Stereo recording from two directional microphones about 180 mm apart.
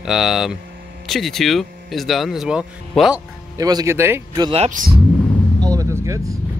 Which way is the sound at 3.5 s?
20° right (ahead or behind).